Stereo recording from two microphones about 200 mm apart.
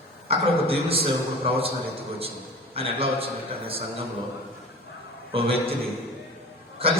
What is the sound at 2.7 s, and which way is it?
A man's voice, 30° right (ahead or behind).